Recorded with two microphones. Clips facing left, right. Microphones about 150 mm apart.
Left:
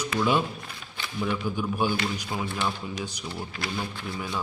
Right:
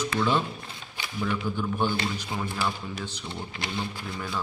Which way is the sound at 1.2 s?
10° left (ahead or behind).